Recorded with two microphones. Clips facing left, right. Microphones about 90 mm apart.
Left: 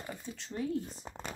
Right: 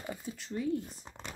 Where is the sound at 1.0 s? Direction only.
40° left (ahead or behind).